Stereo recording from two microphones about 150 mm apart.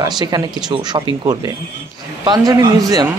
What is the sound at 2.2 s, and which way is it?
Speech, 30° right (ahead or behind).